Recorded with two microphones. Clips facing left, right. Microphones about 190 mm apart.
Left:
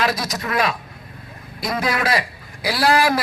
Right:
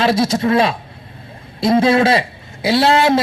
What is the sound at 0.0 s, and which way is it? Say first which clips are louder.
A man's voice: right 8 dB; 25° right (ahead or behind).